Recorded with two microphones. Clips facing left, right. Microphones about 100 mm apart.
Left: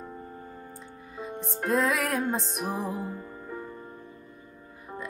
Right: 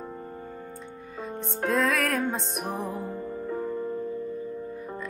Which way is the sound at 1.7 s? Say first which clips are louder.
Even; 5° left (ahead or behind).